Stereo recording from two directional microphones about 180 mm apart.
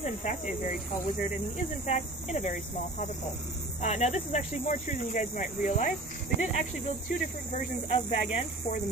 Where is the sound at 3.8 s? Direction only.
40° left (ahead or behind).